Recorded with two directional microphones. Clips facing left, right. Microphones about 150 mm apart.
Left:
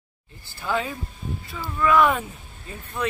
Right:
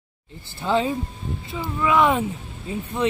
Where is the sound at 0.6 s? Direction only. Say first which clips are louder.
Right 5 dB; 25° right (ahead or behind).